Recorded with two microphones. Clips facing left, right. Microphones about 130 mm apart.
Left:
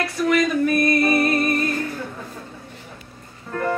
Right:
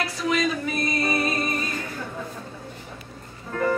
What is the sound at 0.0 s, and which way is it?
Music, 60° left (ahead or behind).